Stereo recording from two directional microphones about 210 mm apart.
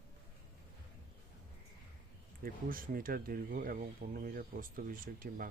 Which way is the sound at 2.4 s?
40° right (ahead or behind).